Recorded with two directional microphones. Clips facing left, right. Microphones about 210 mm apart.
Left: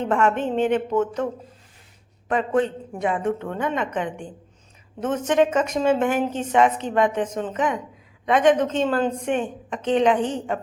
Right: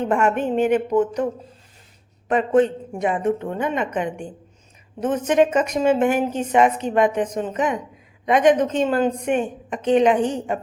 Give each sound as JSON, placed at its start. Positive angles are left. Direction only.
{"t": 0.0, "sound": "a woman's voice", "side_deg": -10}
{"t": 2.3, "sound": "a woman's voice", "side_deg": -20}